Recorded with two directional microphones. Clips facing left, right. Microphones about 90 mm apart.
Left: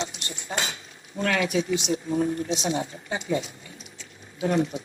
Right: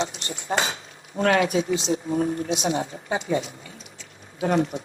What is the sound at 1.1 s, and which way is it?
Speech, 50° right (ahead or behind).